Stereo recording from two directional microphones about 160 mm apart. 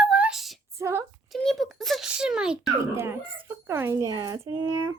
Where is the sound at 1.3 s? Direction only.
Centre (ahead or behind).